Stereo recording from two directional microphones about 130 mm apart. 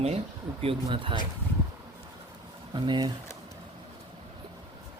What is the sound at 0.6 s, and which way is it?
Speech, 40° right (ahead or behind).